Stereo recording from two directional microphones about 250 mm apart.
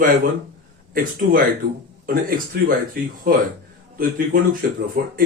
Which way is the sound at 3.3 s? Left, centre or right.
Right.